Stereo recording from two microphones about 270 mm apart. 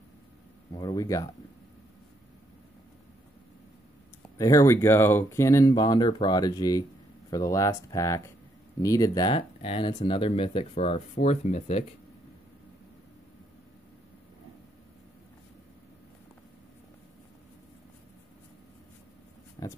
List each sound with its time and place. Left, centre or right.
0.7 s speech: centre
4.4 s speech: centre
19.6 s a sound: centre